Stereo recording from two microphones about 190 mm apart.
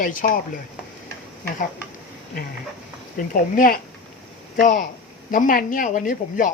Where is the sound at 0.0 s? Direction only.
45° left (ahead or behind).